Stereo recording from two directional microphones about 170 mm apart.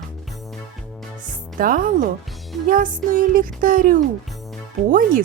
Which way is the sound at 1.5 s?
55° right (ahead or behind).